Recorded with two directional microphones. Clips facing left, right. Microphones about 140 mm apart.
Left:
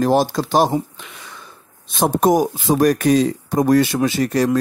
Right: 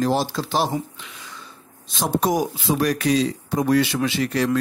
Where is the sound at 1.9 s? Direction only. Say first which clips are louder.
Left 6 dB; 50° left (ahead or behind).